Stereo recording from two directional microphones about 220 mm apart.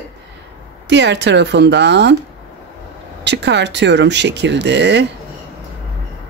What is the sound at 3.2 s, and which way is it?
Speech, 50° right (ahead or behind).